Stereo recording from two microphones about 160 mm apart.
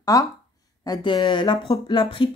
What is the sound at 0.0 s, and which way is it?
A woman's voice, 20° left (ahead or behind).